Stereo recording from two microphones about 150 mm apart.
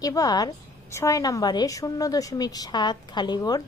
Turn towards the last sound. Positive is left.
turn(degrees=25)  # may be behind; listen again after turning